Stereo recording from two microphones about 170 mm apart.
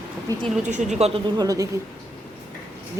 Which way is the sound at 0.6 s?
45° right (ahead or behind).